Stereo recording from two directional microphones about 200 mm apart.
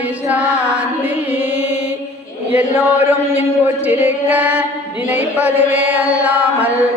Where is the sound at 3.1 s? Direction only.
10° right (ahead or behind).